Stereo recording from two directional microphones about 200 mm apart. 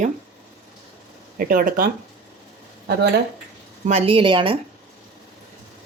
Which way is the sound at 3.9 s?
30° right (ahead or behind).